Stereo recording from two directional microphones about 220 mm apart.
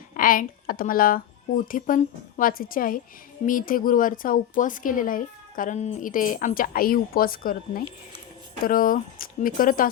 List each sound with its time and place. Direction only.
0.1 s speech: 40° left (ahead or behind)